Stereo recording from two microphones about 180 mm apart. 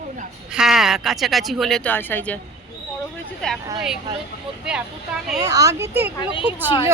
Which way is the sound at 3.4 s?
5° left (ahead or behind).